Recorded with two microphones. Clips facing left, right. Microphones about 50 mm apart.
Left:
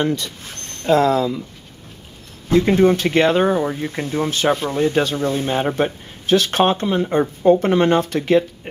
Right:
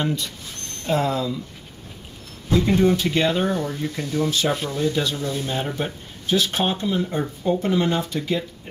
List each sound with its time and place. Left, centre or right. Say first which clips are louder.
0.0 s speech: left 4 dB; left
2.8 s speech: left 5 dB; left
3.5 s speech: left 5 dB; left
3.9 s speech: left 2 dB; left